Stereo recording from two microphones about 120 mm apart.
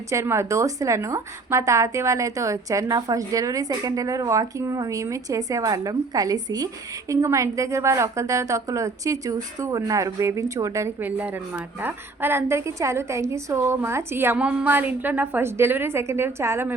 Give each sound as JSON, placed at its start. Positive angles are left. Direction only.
{"t": 0.1, "sound": "a woman's voice", "side_deg": -25}